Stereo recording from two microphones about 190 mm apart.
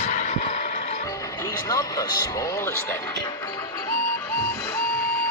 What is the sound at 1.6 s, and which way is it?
Speech, 20° left (ahead or behind).